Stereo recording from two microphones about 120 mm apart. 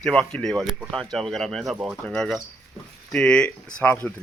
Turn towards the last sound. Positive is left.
turn(degrees=15)  # may be behind; listen again after turning